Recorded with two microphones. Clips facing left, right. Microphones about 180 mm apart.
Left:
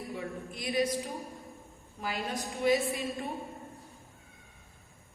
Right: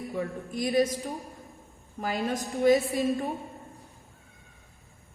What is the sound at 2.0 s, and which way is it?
Speech, 45° right (ahead or behind).